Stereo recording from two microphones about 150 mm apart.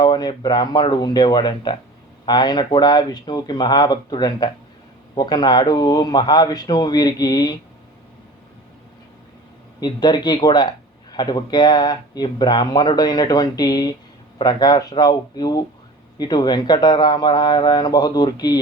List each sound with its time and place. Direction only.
0.0 s speech: 25° left (ahead or behind)
9.8 s speech: 30° left (ahead or behind)